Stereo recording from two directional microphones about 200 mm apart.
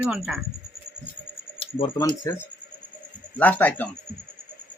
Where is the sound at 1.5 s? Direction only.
25° left (ahead or behind).